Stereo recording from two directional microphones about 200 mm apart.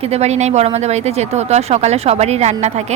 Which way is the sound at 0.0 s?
30° right (ahead or behind).